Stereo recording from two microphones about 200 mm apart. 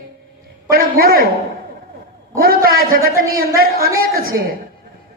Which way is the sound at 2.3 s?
50° right (ahead or behind).